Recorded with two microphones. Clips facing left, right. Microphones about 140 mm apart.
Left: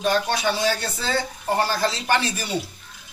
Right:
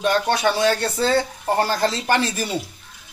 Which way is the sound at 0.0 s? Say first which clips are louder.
Right 3 dB; 60° right (ahead or behind).